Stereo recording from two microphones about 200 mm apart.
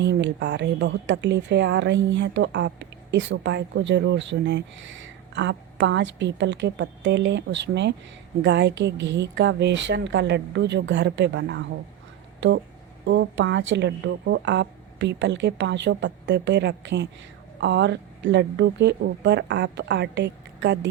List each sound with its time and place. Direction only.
0.0 s a woman's voice: 60° right (ahead or behind)
13.1 s a woman's voice: 60° right (ahead or behind)